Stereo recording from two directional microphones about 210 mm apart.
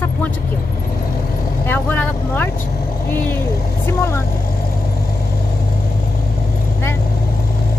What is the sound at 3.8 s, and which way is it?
Speech, 10° left (ahead or behind).